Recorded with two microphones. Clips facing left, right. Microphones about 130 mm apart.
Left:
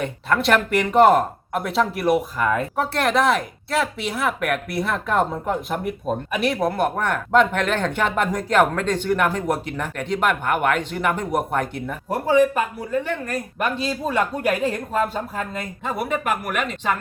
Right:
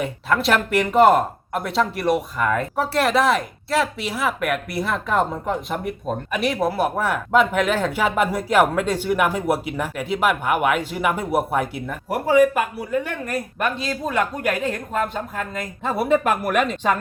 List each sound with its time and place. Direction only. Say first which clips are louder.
0.0 s speech: even; centre (ahead or behind)
13.6 s speech: left 2 dB; 5° left (ahead or behind)
16.0 s speech: right 5 dB; 35° right (ahead or behind)